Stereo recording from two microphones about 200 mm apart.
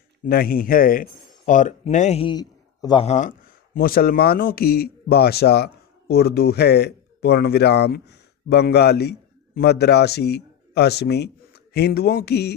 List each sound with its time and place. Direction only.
0.3 s a man's voice: 45° left (ahead or behind)